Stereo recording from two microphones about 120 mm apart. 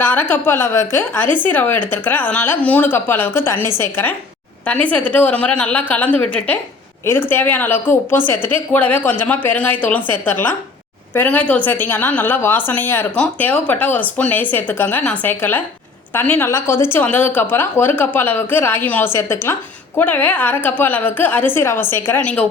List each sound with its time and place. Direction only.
0.0 s a woman's voice: 15° left (ahead or behind)